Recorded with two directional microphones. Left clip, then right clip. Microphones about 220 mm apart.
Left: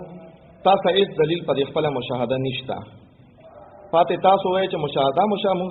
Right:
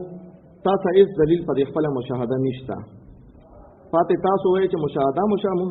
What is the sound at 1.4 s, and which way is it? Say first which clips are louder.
Speech: left 1 dB; 25° right (ahead or behind).